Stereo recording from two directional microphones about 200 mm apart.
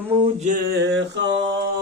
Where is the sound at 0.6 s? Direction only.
55° right (ahead or behind).